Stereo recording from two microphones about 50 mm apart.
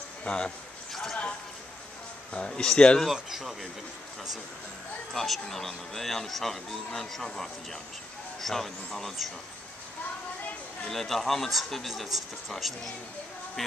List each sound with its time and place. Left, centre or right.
0.2 s speech: centre
2.3 s speech: centre
3.1 s speech: centre
5.1 s speech: centre
10.9 s speech: centre